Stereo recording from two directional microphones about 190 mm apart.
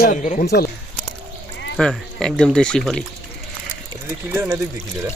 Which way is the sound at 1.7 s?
5° left (ahead or behind).